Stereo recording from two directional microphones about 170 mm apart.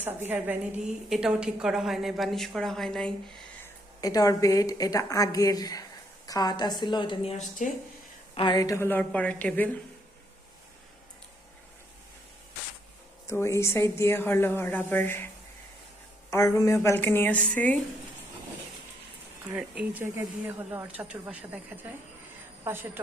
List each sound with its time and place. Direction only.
0.0 s a woman's voice: 10° right (ahead or behind)
4.0 s a woman's voice: 20° left (ahead or behind)
7.6 s speech: 45° left (ahead or behind)
8.4 s speech: 25° left (ahead or behind)
13.2 s speech: 15° left (ahead or behind)
16.3 s speech: 20° left (ahead or behind)
19.5 s speech: 10° right (ahead or behind)
22.6 s a woman's voice: 15° right (ahead or behind)